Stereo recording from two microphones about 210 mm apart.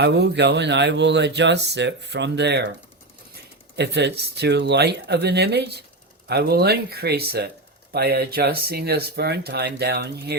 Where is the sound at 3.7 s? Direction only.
55° right (ahead or behind).